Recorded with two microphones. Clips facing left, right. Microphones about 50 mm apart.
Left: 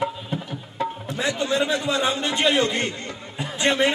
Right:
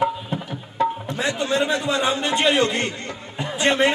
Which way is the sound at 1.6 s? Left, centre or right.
Centre.